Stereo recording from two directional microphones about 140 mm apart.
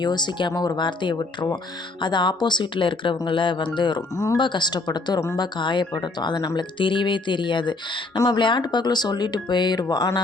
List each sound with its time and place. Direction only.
0.0 s speech: 30° left (ahead or behind)
4.4 s speech: 35° left (ahead or behind)